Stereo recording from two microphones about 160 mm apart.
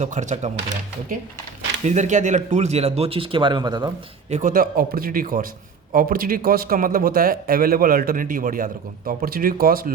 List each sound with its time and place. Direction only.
0.0 s speech: 50° right (ahead or behind)
1.8 s speech: 45° right (ahead or behind); by 3.8 s 30° right (ahead or behind)
4.3 s speech: 45° right (ahead or behind)
4.5 s a man's voice: 65° right (ahead or behind)